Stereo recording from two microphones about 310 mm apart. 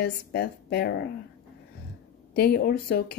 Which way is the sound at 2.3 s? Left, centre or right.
Left.